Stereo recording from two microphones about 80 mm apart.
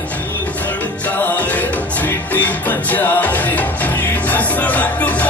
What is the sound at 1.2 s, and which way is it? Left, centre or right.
Music, left.